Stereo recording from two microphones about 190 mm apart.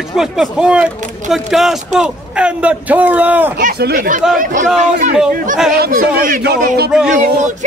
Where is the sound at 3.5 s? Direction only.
50° right (ahead or behind).